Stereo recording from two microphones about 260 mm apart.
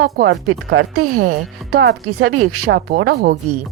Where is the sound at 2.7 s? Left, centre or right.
Right.